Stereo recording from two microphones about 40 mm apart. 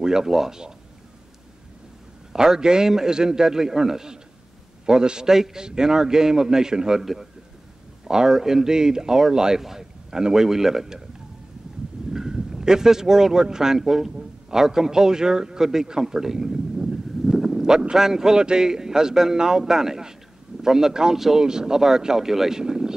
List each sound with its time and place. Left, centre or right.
0.0 s speech: centre
2.3 s speech: centre
12.1 s speech: centre